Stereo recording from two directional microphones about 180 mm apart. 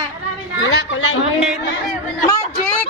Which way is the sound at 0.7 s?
80° left.